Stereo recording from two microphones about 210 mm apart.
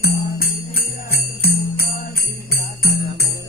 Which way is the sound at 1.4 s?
45° left (ahead or behind).